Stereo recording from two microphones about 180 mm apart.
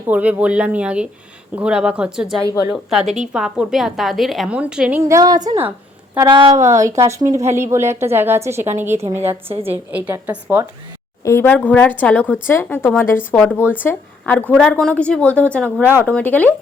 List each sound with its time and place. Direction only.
0.1 s a woman's voice: 10° right (ahead or behind)
11.2 s a woman's voice: 15° left (ahead or behind)
15.8 s a woman's voice: 10° right (ahead or behind)
16.0 s a woman's voice: 10° left (ahead or behind)